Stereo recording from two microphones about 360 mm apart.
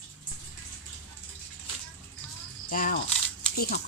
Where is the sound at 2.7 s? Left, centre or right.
Left.